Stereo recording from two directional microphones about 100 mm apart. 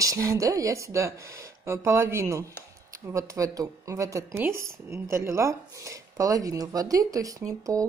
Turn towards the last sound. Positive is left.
turn(degrees=-35)  # may be behind; listen again after turning